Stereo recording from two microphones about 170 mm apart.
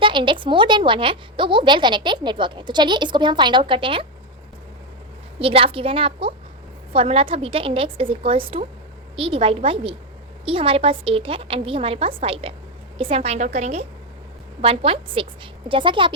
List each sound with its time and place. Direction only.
0.0 s a woman's voice: 30° right (ahead or behind)
5.4 s a woman's voice: 35° right (ahead or behind)